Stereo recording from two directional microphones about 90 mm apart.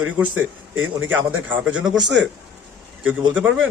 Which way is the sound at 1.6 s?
10° right (ahead or behind).